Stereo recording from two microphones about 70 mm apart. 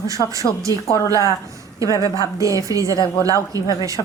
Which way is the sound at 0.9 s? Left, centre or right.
Left.